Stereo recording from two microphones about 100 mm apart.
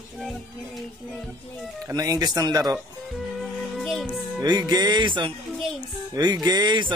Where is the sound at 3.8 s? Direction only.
Centre (ahead or behind).